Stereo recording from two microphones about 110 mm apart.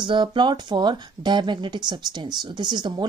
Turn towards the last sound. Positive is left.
turn(degrees=-40)  # may be behind; listen again after turning